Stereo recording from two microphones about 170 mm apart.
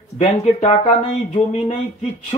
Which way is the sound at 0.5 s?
40° left (ahead or behind).